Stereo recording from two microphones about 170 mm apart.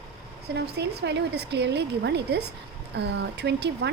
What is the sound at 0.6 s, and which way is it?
A woman's voice, 75° right (ahead or behind).